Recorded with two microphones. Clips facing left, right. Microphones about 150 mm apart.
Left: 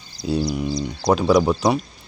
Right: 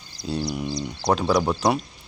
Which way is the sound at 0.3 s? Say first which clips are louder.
Left 5 dB; 5° left (ahead or behind).